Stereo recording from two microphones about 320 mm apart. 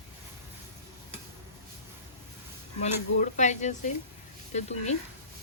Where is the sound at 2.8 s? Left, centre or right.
Left.